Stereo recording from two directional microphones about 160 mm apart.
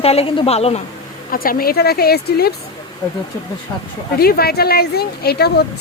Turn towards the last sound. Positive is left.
turn(degrees=85)